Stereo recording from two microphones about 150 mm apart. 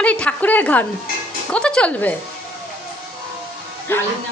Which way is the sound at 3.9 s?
15° left (ahead or behind).